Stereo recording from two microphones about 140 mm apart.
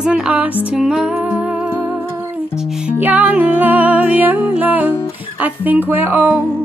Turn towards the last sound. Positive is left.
turn(degrees=-10)  # may be behind; listen again after turning